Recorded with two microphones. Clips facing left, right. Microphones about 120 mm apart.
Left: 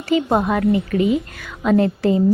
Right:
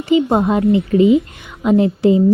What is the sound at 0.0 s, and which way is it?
A woman's voice, 20° right (ahead or behind).